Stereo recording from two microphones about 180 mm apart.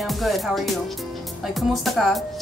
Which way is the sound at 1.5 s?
Centre (ahead or behind).